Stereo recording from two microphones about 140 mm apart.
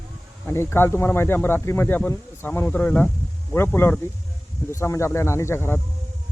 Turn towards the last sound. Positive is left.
turn(degrees=15)  # may be behind; listen again after turning